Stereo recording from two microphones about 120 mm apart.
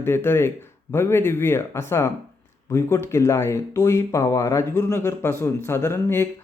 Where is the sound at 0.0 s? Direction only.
20° left (ahead or behind).